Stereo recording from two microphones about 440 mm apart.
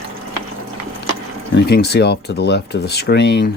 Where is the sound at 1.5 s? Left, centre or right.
Left.